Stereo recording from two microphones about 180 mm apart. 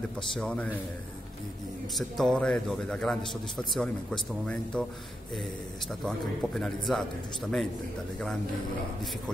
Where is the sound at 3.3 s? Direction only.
25° left (ahead or behind).